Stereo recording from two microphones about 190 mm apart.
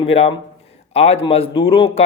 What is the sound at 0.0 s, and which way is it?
A man's voice, 30° left (ahead or behind).